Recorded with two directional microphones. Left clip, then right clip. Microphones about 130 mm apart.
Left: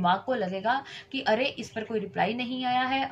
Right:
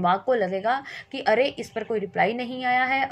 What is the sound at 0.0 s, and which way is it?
A woman's voice, 45° right (ahead or behind).